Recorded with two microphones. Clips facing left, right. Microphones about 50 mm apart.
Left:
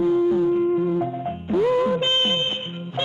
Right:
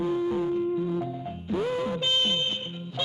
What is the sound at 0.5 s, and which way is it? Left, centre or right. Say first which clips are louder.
Music: left 7 dB; left.